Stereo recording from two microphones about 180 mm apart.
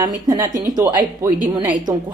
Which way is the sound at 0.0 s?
20° right (ahead or behind).